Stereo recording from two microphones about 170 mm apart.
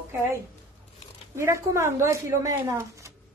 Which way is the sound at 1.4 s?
15° right (ahead or behind).